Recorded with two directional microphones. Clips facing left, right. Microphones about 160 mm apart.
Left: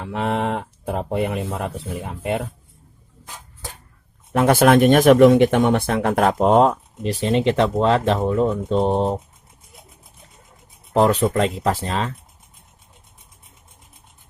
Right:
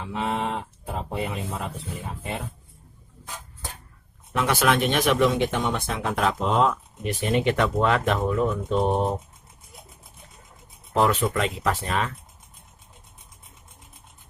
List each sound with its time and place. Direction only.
0.0 s speech: 60° left (ahead or behind)
4.3 s speech: 45° left (ahead or behind)
7.0 s speech: 30° left (ahead or behind)
10.9 s speech: 35° left (ahead or behind)